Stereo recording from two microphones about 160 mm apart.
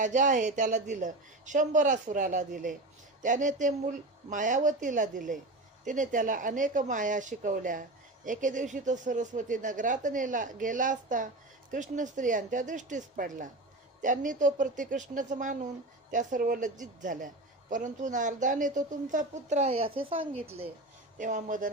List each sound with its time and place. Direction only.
0.0 s speech: 55° right (ahead or behind); by 20.7 s 35° right (ahead or behind)
21.2 s speech: 50° right (ahead or behind)